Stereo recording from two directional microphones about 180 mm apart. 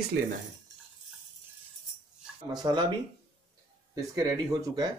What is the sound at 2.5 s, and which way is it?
Speech, 25° right (ahead or behind).